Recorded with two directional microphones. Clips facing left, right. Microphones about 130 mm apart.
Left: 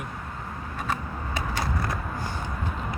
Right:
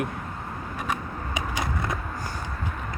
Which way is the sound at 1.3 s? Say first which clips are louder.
Even; 20° right (ahead or behind).